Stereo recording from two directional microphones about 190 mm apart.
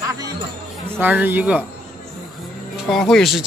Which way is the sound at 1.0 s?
10° right (ahead or behind).